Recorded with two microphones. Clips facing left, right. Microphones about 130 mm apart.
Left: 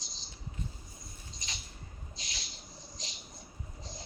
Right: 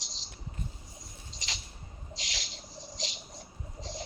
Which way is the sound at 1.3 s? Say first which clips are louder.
Right 4 dB; 90° right.